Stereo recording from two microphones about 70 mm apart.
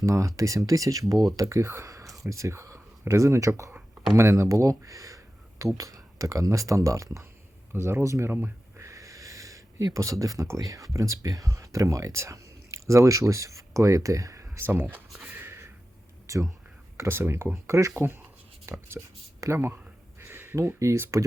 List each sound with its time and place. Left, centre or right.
0.0 s speech: right
8.8 s a sound: right
10.4 s speech: right
14.7 s speech: right
15.2 s a sound: right
16.2 s whispering: right
17.0 s speech: right
17.9 s speech: right
18.7 s speech: right
20.2 s a sound: right
20.7 s speech: right